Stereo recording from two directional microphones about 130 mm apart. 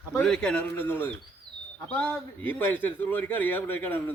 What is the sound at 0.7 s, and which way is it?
A man's voice, 15° left (ahead or behind).